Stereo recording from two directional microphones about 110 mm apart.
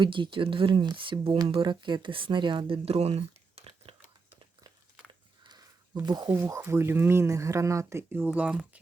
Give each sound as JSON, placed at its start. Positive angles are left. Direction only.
{"t": 0.0, "sound": "speech", "side_deg": -50}
{"t": 5.4, "sound": "a sound", "side_deg": -40}
{"t": 6.1, "sound": "speech", "side_deg": -40}
{"t": 6.3, "sound": "speech", "side_deg": -20}